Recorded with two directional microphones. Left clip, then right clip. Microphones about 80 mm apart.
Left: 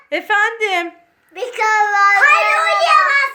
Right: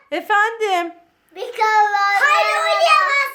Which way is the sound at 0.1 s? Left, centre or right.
Right.